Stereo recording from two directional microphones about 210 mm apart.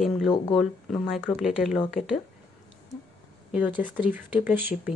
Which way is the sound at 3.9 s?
5° right (ahead or behind).